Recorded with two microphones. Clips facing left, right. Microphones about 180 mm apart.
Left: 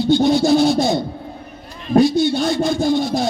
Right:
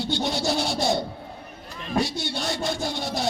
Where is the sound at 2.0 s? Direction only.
75° right (ahead or behind).